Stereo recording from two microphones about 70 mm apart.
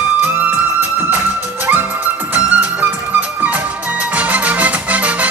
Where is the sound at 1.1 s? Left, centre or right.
Right.